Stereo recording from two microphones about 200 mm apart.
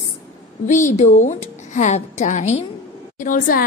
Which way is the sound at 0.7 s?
35° left (ahead or behind).